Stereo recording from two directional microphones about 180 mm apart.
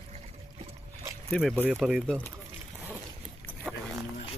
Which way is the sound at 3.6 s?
5° right (ahead or behind).